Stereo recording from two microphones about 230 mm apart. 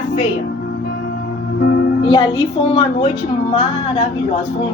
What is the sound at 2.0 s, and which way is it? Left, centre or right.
A woman's voice, left.